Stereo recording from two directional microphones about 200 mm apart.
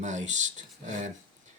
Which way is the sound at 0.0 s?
35° right (ahead or behind).